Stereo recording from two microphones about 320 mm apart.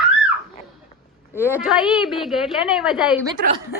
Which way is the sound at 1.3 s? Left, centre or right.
Centre.